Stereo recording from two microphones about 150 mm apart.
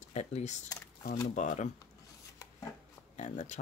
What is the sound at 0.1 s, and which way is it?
Speech, 50° left (ahead or behind).